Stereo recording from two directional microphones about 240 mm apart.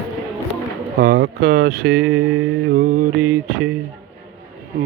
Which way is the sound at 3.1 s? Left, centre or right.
Centre.